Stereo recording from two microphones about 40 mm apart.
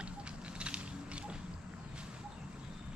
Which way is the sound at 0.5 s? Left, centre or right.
Right.